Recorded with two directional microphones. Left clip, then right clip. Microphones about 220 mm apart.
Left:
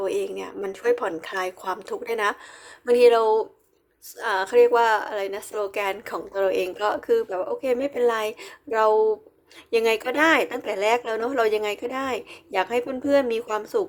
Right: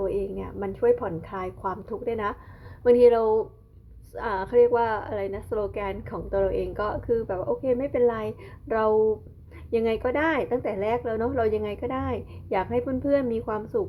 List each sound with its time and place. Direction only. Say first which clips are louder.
0.0 s a woman's voice: left 2 dB; 20° left (ahead or behind)